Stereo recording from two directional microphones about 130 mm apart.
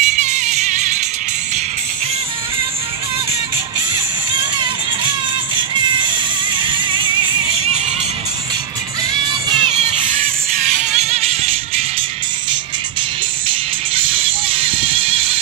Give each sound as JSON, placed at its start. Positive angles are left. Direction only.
{"t": 0.0, "sound": "music", "side_deg": -65}
{"t": 5.6, "sound": "music", "side_deg": -40}
{"t": 9.1, "sound": "music", "side_deg": -35}
{"t": 10.6, "sound": "music", "side_deg": -75}
{"t": 13.5, "sound": "music", "side_deg": -45}